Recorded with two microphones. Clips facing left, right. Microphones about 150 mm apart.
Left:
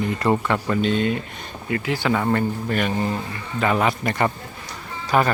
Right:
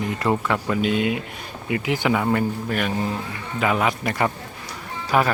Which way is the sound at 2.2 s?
5° right (ahead or behind).